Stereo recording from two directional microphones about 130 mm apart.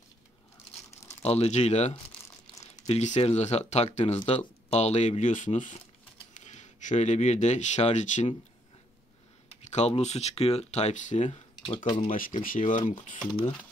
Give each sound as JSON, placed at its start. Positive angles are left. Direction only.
{"t": 1.0, "sound": "speech", "side_deg": 55}
{"t": 9.5, "sound": "speech", "side_deg": 55}
{"t": 11.6, "sound": "speech", "side_deg": 40}
{"t": 12.1, "sound": "speech", "side_deg": 90}